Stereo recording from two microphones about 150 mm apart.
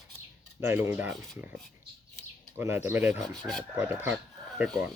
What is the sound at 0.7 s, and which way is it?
Speech, 15° right (ahead or behind).